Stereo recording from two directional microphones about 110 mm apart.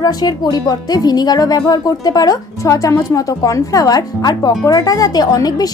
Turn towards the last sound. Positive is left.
turn(degrees=35)  # may be behind; listen again after turning